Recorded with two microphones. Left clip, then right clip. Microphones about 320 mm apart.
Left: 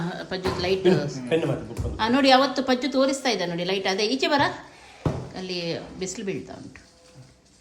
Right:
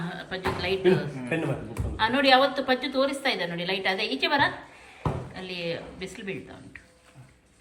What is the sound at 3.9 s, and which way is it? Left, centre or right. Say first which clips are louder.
Speech: left 4 dB; left.